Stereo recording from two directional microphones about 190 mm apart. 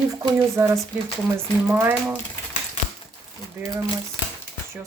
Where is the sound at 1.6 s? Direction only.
10° right (ahead or behind).